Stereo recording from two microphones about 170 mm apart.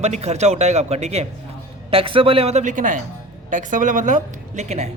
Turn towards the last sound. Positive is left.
turn(degrees=-40)  # may be behind; listen again after turning